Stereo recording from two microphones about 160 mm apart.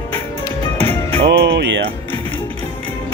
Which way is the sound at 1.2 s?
90° right.